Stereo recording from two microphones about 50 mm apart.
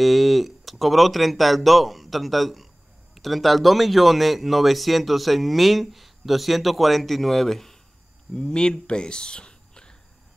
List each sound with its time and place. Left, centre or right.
0.0 s speech: centre